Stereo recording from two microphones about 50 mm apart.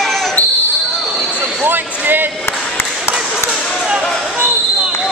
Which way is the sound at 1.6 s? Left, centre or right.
Right.